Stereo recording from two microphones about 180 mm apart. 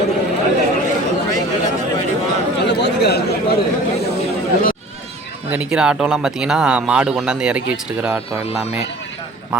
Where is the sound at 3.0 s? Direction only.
65° left (ahead or behind).